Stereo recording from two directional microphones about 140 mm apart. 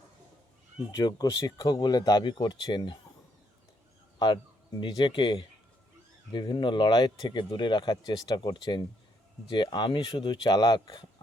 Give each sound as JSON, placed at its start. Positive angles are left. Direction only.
{"t": 0.9, "sound": "speech", "side_deg": 30}
{"t": 4.8, "sound": "speech", "side_deg": 30}